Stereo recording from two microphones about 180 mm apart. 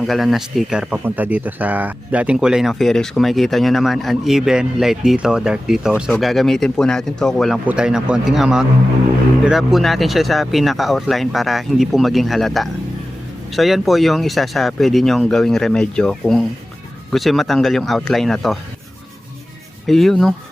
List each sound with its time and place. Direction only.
0.0 s speech: centre (ahead or behind)
19.9 s speech: centre (ahead or behind)